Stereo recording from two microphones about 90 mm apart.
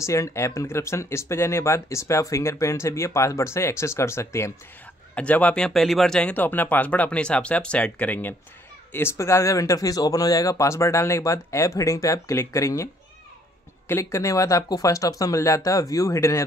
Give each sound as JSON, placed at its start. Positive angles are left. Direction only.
{"t": 0.0, "sound": "speech", "side_deg": 35}
{"t": 5.1, "sound": "speech", "side_deg": 15}